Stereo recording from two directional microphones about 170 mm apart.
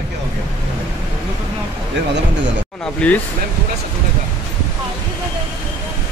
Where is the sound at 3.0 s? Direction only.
5° left (ahead or behind).